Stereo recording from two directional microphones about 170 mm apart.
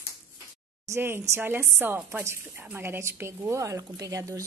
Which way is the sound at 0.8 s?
15° right (ahead or behind).